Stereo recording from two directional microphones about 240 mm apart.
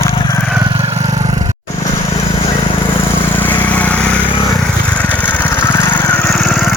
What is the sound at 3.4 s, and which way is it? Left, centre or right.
Vehicle, centre.